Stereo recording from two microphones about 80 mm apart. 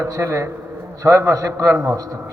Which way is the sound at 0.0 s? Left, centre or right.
Right.